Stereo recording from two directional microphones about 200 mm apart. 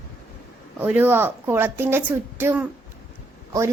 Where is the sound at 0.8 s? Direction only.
10° right (ahead or behind).